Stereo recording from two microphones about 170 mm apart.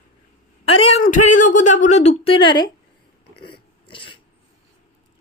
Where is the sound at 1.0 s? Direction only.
50° left (ahead or behind); by 2.7 s 25° left (ahead or behind).